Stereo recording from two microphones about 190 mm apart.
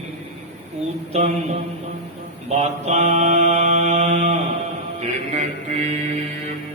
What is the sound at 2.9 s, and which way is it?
A man's voice, 35° right (ahead or behind).